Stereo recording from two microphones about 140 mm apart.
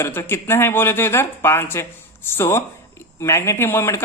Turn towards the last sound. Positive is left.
turn(degrees=20)  # may be behind; listen again after turning